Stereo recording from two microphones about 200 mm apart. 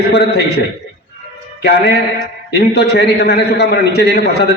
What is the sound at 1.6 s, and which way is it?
A man's voice, 55° left (ahead or behind).